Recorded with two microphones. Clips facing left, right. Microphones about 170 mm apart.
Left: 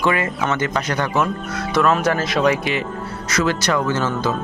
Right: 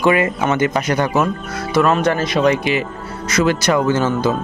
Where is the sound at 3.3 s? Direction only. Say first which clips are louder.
Right 4 dB; 15° right (ahead or behind).